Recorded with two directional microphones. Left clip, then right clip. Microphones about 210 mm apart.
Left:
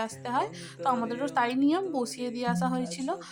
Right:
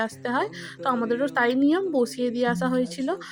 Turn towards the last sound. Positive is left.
turn(degrees=-20)  # may be behind; listen again after turning